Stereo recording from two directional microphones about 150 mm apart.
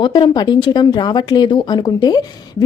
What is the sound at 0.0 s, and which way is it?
Speech, 30° left (ahead or behind).